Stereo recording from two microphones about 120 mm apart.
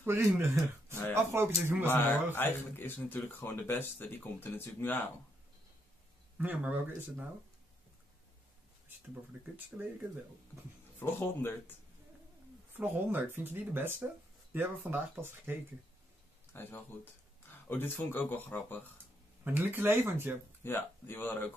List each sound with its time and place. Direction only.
0.0 s speech: 20° right (ahead or behind)
2.3 s speech: 15° left (ahead or behind)
6.3 s speech: 10° right (ahead or behind)
9.7 s speech: 15° right (ahead or behind)
11.0 s speech: 20° left (ahead or behind)
12.7 s speech: 15° right (ahead or behind)
16.5 s speech: 20° left (ahead or behind)
19.4 s speech: 15° right (ahead or behind)
20.6 s speech: 15° left (ahead or behind)